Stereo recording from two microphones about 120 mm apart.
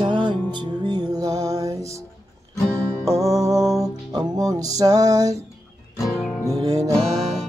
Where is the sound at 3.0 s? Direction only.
30° right (ahead or behind).